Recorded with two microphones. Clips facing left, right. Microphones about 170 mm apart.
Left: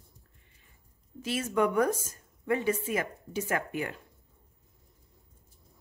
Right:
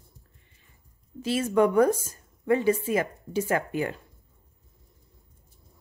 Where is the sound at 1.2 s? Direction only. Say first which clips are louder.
Right 5 dB; 30° right (ahead or behind).